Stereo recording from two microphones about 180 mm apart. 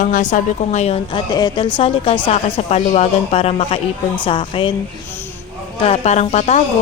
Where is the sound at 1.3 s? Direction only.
25° left (ahead or behind).